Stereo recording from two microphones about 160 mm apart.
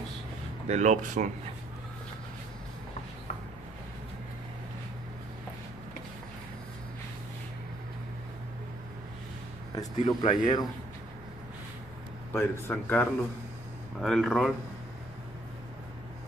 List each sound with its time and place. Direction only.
0.7 s speech: 50° right (ahead or behind)
9.8 s speech: 25° left (ahead or behind)
12.3 s speech: 15° left (ahead or behind)